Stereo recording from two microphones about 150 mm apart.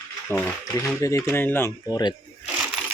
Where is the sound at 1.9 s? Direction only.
25° left (ahead or behind).